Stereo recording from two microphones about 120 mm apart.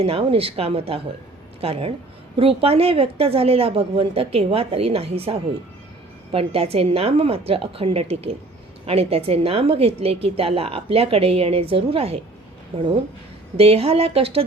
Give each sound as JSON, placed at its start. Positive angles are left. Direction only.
{"t": 0.0, "sound": "a woman's voice", "side_deg": -50}